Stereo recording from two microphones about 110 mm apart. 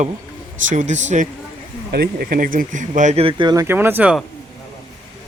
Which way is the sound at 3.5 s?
20° right (ahead or behind).